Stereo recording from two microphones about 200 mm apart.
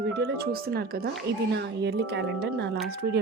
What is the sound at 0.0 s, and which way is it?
Speech, 50° right (ahead or behind).